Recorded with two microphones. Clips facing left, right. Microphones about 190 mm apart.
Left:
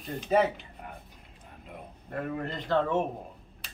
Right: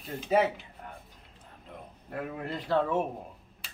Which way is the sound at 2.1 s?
5° right (ahead or behind).